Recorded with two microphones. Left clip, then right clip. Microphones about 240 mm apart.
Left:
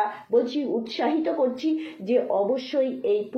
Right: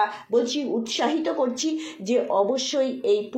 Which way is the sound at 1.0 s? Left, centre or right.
Centre.